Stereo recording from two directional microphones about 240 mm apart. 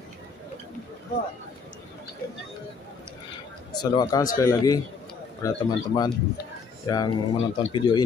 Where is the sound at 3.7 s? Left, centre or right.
Centre.